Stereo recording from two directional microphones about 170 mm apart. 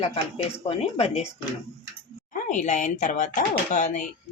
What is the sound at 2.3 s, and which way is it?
Speech, 50° left (ahead or behind).